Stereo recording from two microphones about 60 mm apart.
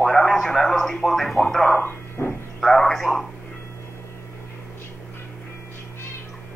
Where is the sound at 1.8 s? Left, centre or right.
Left.